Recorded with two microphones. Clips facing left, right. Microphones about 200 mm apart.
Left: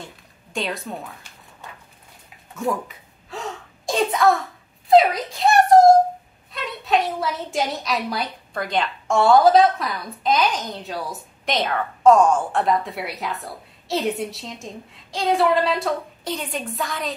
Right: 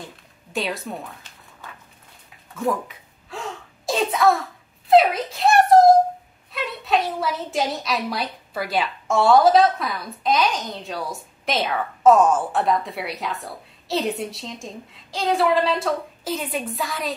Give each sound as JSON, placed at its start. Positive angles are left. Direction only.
{"t": 0.0, "sound": "a woman's voice", "side_deg": 0}
{"t": 2.5, "sound": "speech", "side_deg": 0}
{"t": 3.3, "sound": "gasp", "side_deg": 0}
{"t": 4.8, "sound": "a sound", "side_deg": 0}
{"t": 6.5, "sound": "a woman's voice", "side_deg": 0}